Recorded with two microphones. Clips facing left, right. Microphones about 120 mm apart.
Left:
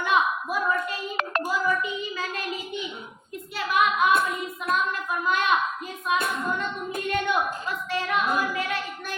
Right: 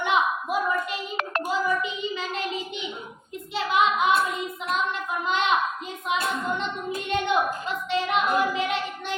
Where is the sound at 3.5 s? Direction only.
25° right (ahead or behind).